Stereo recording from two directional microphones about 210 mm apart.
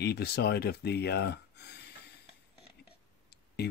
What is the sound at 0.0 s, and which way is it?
Speech, 50° left (ahead or behind).